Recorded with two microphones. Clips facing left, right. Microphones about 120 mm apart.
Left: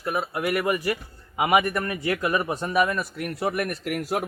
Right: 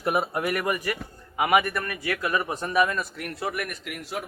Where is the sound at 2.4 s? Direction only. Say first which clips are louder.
Left 1 dB; 10° left (ahead or behind).